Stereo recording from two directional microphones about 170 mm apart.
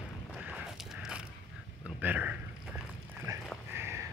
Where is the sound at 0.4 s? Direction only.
5° right (ahead or behind).